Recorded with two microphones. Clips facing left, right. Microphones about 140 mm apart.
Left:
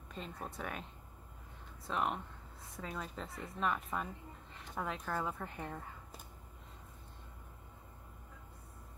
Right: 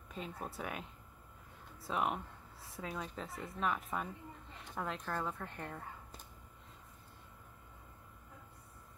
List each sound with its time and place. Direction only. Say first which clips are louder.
0.1 s a woman's voice: right 1 dB; 5° right (ahead or behind)
1.9 s a woman's voice: even; 5° right (ahead or behind)